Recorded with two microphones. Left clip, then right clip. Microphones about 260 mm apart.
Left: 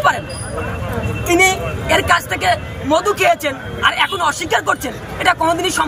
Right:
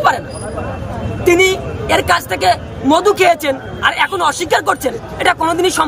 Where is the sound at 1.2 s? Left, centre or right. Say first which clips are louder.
Right 2 dB; centre.